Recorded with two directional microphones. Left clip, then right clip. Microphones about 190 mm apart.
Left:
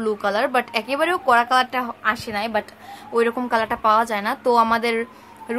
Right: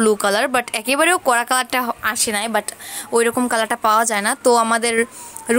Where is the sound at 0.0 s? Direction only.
35° right (ahead or behind).